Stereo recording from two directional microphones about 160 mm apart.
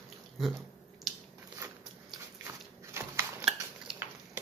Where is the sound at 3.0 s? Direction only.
15° right (ahead or behind).